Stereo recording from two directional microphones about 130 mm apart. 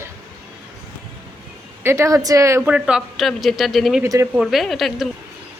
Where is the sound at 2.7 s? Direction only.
5° right (ahead or behind).